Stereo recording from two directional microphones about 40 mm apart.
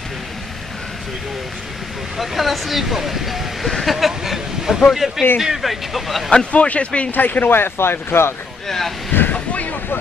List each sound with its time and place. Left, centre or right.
2.1 s speech: centre
6.5 s speech: left
7.1 s speech: left
8.6 s speech: centre
9.3 s ocean: left